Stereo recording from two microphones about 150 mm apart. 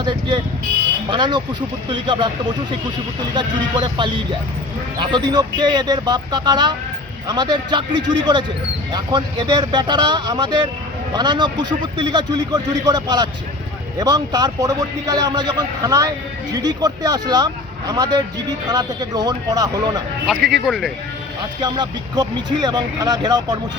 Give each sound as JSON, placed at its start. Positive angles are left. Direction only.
{"t": 0.0, "sound": "a man's voice", "side_deg": -30}
{"t": 20.2, "sound": "speech", "side_deg": 0}
{"t": 21.6, "sound": "a man's voice", "side_deg": -30}